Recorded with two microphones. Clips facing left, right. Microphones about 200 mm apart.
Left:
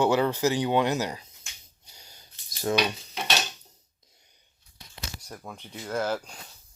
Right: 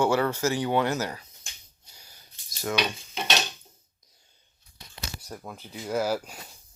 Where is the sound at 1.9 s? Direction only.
25° left (ahead or behind).